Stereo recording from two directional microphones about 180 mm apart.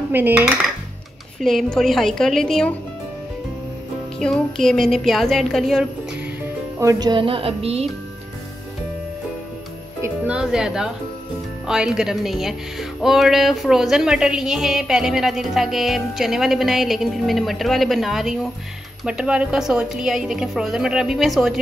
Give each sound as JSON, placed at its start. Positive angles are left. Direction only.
{"t": 0.1, "sound": "dishes", "side_deg": -10}
{"t": 1.4, "sound": "speech", "side_deg": 0}
{"t": 4.2, "sound": "speech", "side_deg": 5}
{"t": 6.4, "sound": "speech", "side_deg": -15}
{"t": 10.0, "sound": "speech", "side_deg": -5}